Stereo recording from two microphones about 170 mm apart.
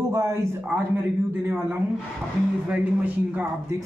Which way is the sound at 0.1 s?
15° right (ahead or behind).